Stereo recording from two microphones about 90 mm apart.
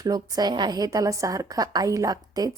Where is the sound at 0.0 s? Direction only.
45° right (ahead or behind).